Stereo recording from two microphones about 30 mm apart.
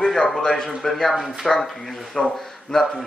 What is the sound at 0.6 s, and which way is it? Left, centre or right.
Speech, centre.